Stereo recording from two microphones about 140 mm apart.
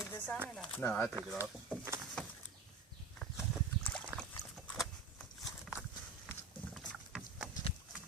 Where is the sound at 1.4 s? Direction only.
15° right (ahead or behind).